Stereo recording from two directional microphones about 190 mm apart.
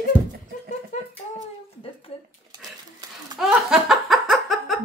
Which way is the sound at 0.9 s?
40° left (ahead or behind).